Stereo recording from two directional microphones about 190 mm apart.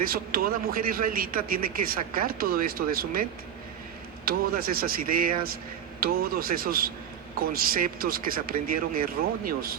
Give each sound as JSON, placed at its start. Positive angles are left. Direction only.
{"t": 0.0, "sound": "a man's voice", "side_deg": -50}
{"t": 4.3, "sound": "a man's voice", "side_deg": -50}